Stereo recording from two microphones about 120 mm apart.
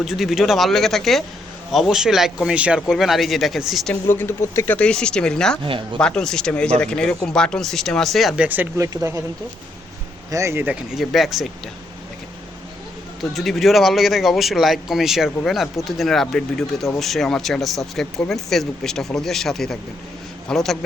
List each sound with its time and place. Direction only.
0.0 s speech: centre (ahead or behind)
4.0 s speech: 20° left (ahead or behind)
5.6 s speech: 45° right (ahead or behind)
6.0 s speech: 5° left (ahead or behind)
8.4 s speech: 15° right (ahead or behind)
8.8 s speech: 25° right (ahead or behind)
10.3 s speech: 25° right (ahead or behind)
10.9 s speech: centre (ahead or behind)
13.3 s speech: centre (ahead or behind)